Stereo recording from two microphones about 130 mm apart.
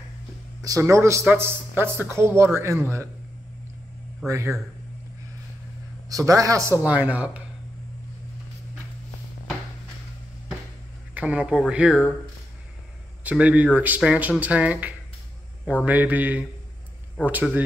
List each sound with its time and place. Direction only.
0.6 s speech: 25° right (ahead or behind)
4.3 s speech: 25° right (ahead or behind)
6.0 s speech: 25° right (ahead or behind)
6.8 s speech: 10° right (ahead or behind)
11.1 s speech: 10° right (ahead or behind)
13.2 s speech: 10° right (ahead or behind)